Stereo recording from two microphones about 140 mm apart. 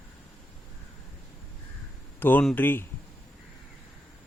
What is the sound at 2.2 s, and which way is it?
Speech, 15° left (ahead or behind).